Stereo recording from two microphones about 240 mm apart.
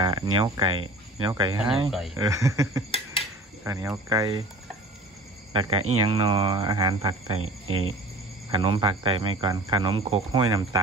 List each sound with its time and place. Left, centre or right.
0.0 s speech: centre
1.9 s speech: centre
2.1 s speech: centre
5.5 s speech: right
7.3 s speech: right
8.5 s speech: centre